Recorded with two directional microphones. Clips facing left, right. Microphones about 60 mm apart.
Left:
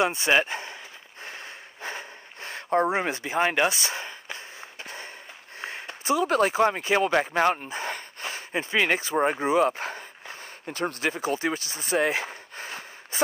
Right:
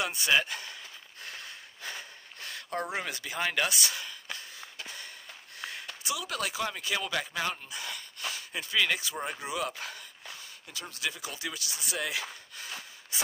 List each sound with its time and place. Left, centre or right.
0.0 s speech: left
1.2 s a sound: left
5.6 s speech: left